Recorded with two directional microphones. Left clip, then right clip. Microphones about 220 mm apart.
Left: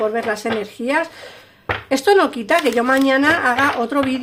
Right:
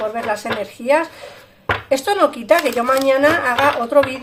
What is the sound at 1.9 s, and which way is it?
Speech, 45° left (ahead or behind).